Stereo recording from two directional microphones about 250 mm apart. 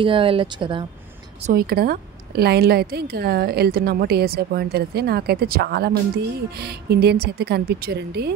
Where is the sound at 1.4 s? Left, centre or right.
Right.